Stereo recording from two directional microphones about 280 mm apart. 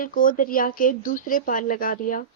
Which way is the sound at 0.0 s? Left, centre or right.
Left.